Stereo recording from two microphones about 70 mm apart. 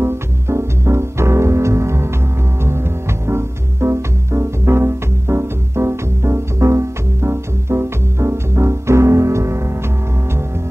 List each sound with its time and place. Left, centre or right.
0.0 s music: right